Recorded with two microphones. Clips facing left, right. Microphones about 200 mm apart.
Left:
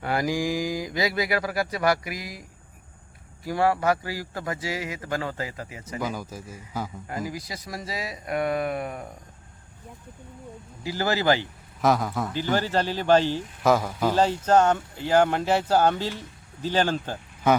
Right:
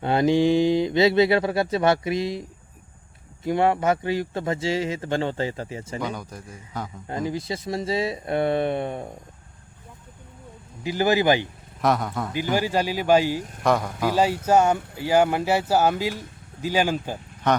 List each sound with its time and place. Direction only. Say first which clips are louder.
0.0 s speech: right 7 dB; 25° right (ahead or behind)
6.0 s a man's voice: left 3 dB; 5° left (ahead or behind)
7.1 s speech: right 9 dB; 25° right (ahead or behind)
10.8 s speech: right 3 dB; 15° right (ahead or behind)
11.8 s a man's voice: even; centre (ahead or behind)
12.3 s speech: right 2 dB; 10° right (ahead or behind)
13.6 s a man's voice: left 1 dB; centre (ahead or behind)
14.1 s speech: right 1 dB; 10° right (ahead or behind)
17.5 s speech: left 1 dB; 5° left (ahead or behind)